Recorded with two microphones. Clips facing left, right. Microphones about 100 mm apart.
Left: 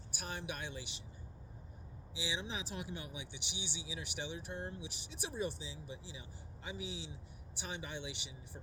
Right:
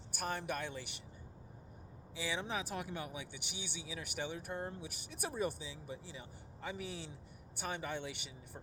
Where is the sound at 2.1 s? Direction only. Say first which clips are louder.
Right 3 dB; 55° right (ahead or behind).